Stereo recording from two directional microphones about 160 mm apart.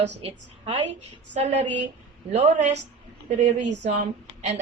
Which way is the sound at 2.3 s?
45° right (ahead or behind).